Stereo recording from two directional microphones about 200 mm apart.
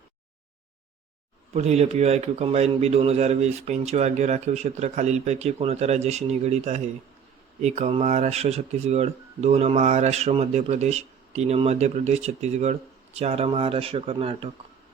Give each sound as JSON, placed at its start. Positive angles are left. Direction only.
{"t": 1.5, "sound": "a man's voice", "side_deg": -30}